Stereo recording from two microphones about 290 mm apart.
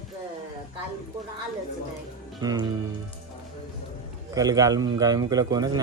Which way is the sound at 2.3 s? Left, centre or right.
Centre.